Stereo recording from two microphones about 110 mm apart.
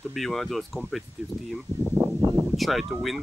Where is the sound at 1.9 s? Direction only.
30° right (ahead or behind).